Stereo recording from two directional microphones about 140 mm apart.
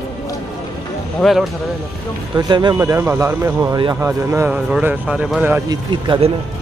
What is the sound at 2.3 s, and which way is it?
A man's voice, 30° right (ahead or behind).